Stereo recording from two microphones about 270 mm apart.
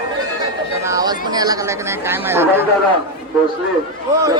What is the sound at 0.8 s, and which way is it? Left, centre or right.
Speech, centre.